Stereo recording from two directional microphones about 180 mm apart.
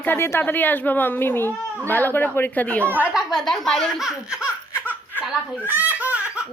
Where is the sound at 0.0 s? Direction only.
10° left (ahead or behind).